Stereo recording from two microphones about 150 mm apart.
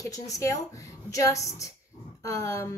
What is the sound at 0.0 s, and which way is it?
A woman's voice, 20° left (ahead or behind).